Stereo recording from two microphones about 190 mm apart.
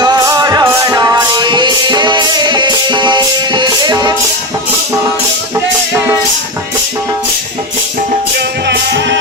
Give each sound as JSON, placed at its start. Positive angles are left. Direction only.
{"t": 0.0, "sound": "music", "side_deg": -20}
{"t": 5.5, "sound": "music", "side_deg": -15}
{"t": 8.4, "sound": "music", "side_deg": -60}